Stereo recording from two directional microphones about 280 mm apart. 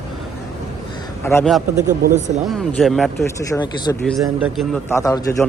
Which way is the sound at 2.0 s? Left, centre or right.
Right.